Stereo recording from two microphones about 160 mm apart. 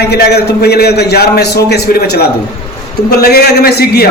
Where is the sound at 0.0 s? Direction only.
90° left.